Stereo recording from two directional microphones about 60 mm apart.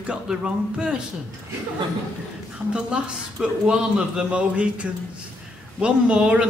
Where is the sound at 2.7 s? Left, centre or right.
Centre.